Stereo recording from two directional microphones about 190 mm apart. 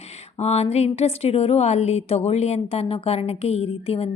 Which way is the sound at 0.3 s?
35° left (ahead or behind).